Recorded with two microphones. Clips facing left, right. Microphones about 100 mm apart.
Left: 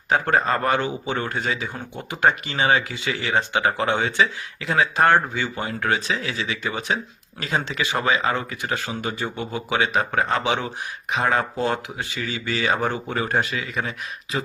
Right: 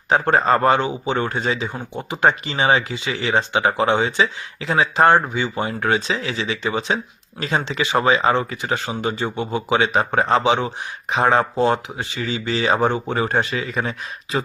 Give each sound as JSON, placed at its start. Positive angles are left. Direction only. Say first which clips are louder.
{"t": 0.1, "sound": "a man's voice", "louder": "right 4 dB", "side_deg": -30}